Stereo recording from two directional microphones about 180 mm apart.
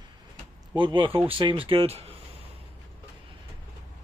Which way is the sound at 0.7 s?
25° right (ahead or behind).